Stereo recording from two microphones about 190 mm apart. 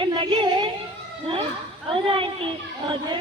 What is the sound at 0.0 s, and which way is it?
Music, 25° right (ahead or behind).